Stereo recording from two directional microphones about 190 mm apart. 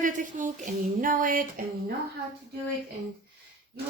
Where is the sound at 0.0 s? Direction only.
45° right (ahead or behind).